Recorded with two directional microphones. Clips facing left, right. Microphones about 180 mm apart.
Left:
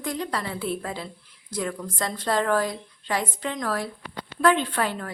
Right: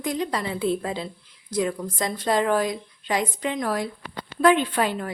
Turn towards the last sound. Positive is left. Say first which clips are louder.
# right 3 dB
turn(degrees=-15)  # may be behind; listen again after turning